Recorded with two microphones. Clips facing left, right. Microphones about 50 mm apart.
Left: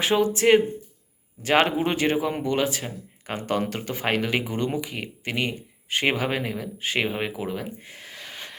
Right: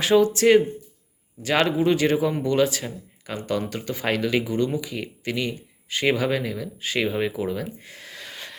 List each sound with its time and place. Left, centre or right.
0.0 s speech: left
1.4 s speech: left
3.2 s speech: left
7.1 s speech: left